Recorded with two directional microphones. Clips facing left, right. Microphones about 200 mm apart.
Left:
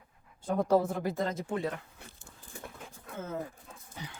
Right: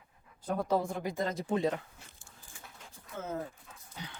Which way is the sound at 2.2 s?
55° left (ahead or behind).